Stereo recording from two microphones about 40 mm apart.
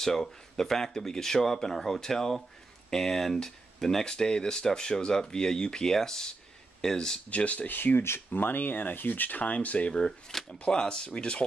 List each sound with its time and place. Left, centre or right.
0.0 s speech: centre
7.2 s speech: left
7.7 s speech: left
9.5 s speech: left
9.9 s speech: centre